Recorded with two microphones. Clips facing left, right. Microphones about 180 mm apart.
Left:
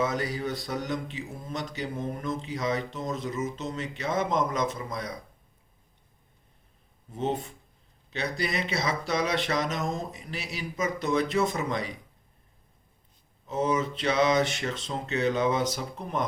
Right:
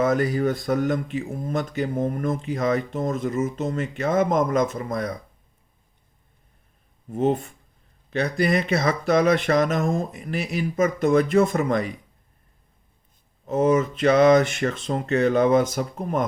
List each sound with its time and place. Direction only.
0.0 s speech: 50° right (ahead or behind)
7.1 s speech: 50° right (ahead or behind)
13.4 s speech: 50° right (ahead or behind)